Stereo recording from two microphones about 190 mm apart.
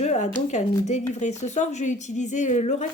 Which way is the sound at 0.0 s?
35° left (ahead or behind).